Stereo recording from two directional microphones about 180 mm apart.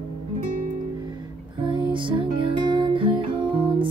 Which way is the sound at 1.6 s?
25° right (ahead or behind).